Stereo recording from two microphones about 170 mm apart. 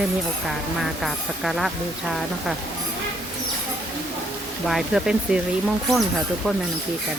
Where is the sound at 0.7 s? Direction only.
Centre (ahead or behind).